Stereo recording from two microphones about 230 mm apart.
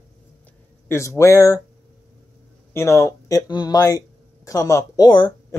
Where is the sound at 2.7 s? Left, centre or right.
Centre.